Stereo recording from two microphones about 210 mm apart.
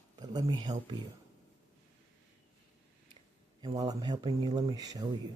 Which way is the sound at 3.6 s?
20° right (ahead or behind).